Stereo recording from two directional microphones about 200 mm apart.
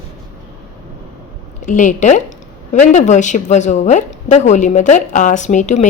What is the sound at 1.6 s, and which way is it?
A woman's voice, 40° left (ahead or behind).